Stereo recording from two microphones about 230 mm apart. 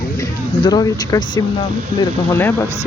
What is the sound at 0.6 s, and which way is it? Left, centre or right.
Speech, centre.